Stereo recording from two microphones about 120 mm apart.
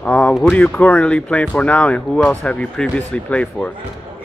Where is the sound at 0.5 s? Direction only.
10° left (ahead or behind).